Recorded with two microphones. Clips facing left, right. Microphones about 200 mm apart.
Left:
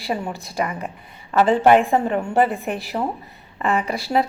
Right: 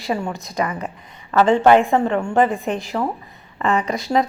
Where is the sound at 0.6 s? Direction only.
15° left (ahead or behind).